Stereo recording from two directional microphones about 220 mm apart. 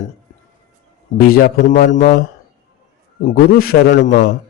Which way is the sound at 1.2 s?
40° left (ahead or behind).